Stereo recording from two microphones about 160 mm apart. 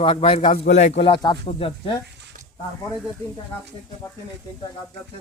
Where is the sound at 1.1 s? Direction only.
30° left (ahead or behind).